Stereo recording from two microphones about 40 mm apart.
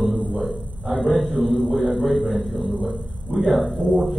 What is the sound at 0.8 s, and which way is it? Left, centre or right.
A man's voice, centre.